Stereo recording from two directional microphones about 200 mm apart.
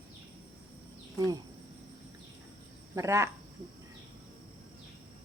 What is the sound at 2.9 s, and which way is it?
Speech, 15° right (ahead or behind).